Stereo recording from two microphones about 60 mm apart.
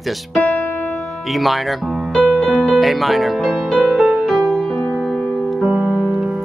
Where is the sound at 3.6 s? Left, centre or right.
Centre.